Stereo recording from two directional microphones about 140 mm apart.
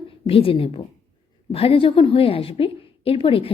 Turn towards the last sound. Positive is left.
turn(degrees=40)  # may be behind; listen again after turning